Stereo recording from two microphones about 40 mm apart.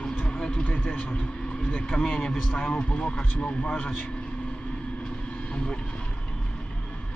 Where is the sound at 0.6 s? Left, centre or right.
Left.